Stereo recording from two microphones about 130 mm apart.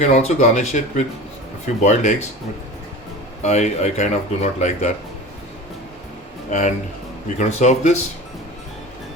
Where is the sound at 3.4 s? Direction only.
60° left (ahead or behind).